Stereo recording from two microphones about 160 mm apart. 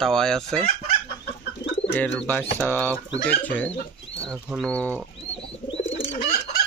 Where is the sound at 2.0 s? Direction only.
10° left (ahead or behind).